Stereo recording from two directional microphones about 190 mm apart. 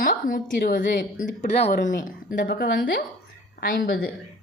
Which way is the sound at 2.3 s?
55° left (ahead or behind).